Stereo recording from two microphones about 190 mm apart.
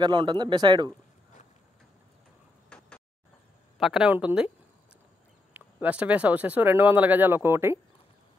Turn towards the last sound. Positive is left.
turn(degrees=-10)  # may be behind; listen again after turning